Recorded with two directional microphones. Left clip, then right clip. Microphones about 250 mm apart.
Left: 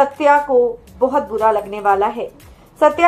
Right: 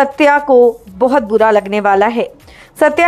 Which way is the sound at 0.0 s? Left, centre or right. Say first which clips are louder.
Right 3 dB; right.